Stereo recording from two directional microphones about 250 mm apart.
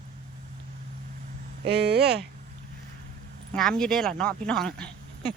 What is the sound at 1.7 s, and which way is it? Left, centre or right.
Speech, right.